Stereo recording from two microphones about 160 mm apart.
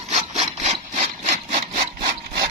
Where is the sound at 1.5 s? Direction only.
40° right (ahead or behind).